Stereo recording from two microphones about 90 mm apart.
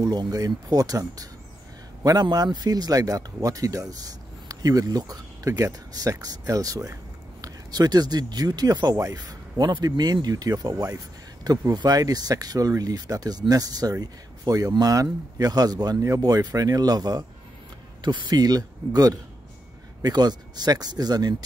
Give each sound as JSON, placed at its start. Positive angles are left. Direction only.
{"t": 0.0, "sound": "speech", "side_deg": -50}
{"t": 11.4, "sound": "speech", "side_deg": -45}